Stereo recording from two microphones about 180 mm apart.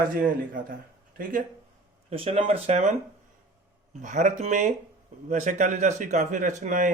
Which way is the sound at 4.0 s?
45° right (ahead or behind).